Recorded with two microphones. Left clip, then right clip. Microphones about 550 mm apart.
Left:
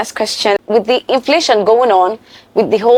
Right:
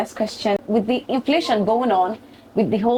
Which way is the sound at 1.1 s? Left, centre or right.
Left.